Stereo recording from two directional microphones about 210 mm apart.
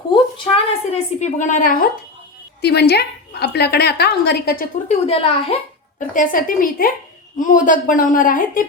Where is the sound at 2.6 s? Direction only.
50° left (ahead or behind).